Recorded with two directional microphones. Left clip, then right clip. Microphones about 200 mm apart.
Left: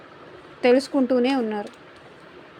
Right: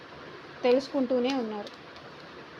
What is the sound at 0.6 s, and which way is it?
Speech, 40° left (ahead or behind).